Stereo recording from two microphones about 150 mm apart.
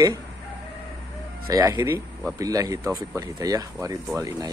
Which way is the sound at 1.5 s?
20° right (ahead or behind).